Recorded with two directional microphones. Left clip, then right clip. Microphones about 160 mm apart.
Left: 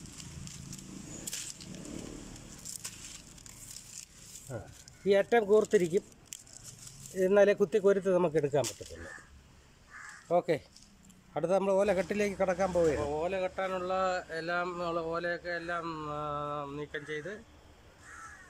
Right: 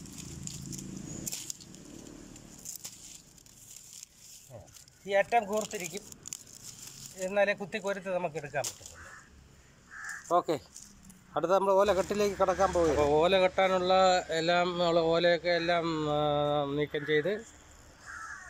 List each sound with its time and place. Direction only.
5.0 s speech: 30° left (ahead or behind)
7.2 s speech: 45° left (ahead or behind)
10.2 s speech: 10° left (ahead or behind)
13.0 s speech: 5° right (ahead or behind)